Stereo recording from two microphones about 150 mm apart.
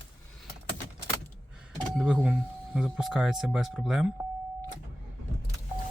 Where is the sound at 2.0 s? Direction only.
10° right (ahead or behind).